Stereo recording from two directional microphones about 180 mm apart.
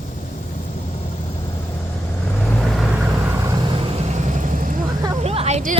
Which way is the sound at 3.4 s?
25° right (ahead or behind).